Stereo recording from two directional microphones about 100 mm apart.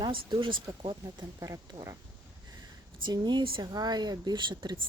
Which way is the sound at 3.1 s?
50° right (ahead or behind).